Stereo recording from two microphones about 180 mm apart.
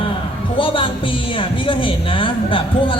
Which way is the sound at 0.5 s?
30° left (ahead or behind).